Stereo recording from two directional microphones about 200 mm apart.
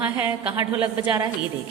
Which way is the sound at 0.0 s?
10° right (ahead or behind).